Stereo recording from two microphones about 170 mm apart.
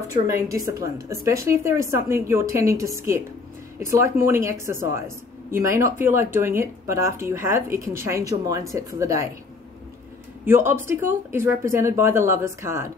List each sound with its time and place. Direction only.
0.1 s speech: 20° right (ahead or behind)
10.4 s speech: 10° right (ahead or behind)